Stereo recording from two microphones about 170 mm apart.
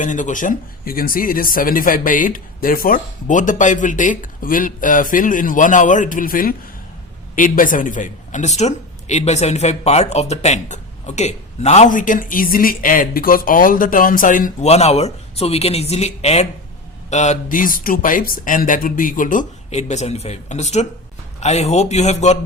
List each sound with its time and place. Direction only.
0.0 s a woman's voice: 50° left (ahead or behind)
14.7 s a woman's voice: 40° left (ahead or behind)